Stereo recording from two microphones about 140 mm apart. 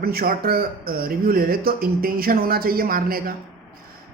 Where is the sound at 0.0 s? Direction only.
90° right.